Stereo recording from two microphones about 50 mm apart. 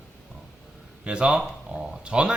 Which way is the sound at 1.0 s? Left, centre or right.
Centre.